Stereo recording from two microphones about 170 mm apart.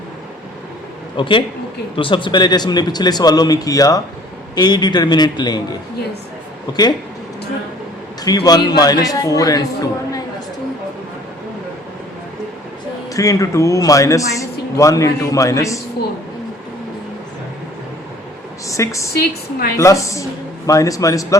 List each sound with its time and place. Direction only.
1.1 s speech: 30° left (ahead or behind)
8.2 s speech: 20° left (ahead or behind)
13.1 s speech: 20° left (ahead or behind)
18.7 s a woman's voice: 20° left (ahead or behind)
19.2 s a woman's voice: 65° left (ahead or behind)
19.7 s speech: 20° left (ahead or behind)